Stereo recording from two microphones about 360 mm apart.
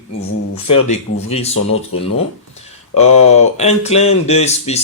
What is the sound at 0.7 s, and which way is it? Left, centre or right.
Speech, centre.